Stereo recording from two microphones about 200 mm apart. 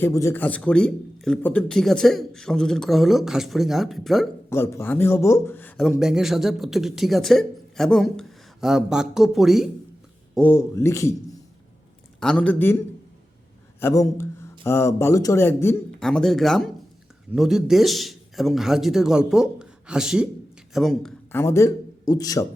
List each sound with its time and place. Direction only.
0.0 s speech: 15° left (ahead or behind)
4.4 s speech: 15° left (ahead or behind)
10.3 s speech: 10° left (ahead or behind)
13.7 s speech: 15° left (ahead or behind)
21.3 s a man's voice: 15° left (ahead or behind)